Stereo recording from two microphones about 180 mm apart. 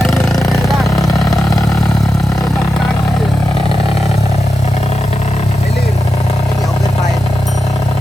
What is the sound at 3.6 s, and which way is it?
Vehicle, 30° left (ahead or behind).